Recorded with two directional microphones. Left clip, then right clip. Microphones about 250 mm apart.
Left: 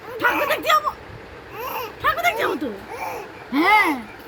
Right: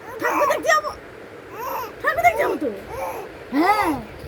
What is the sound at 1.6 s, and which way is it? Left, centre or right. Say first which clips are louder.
Baby cry: right 1 dB; centre.